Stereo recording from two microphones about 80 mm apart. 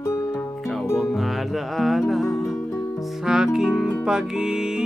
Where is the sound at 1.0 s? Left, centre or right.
Centre.